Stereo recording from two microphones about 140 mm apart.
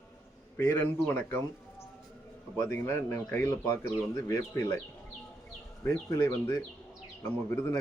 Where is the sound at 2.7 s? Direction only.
15° left (ahead or behind).